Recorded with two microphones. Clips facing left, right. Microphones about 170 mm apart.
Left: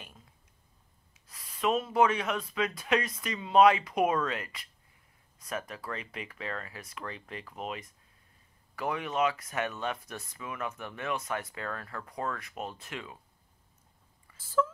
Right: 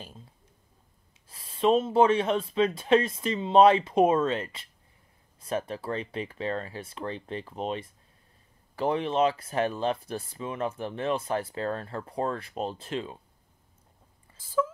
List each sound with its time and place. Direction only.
0.0 s a sound: 30° right (ahead or behind)
1.3 s speech: 30° right (ahead or behind)
14.4 s speech: 15° right (ahead or behind)